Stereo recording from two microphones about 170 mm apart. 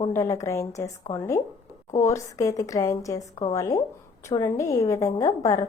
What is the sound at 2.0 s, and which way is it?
A woman's voice, 20° left (ahead or behind).